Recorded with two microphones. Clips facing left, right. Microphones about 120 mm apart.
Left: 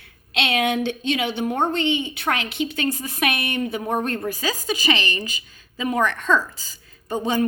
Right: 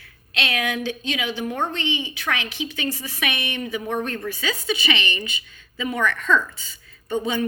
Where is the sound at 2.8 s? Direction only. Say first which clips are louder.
Left 4 dB; 50° left (ahead or behind); by 7.4 s 35° left (ahead or behind).